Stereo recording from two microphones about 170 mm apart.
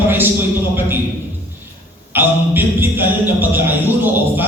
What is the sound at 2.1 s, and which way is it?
Speech, 10° right (ahead or behind).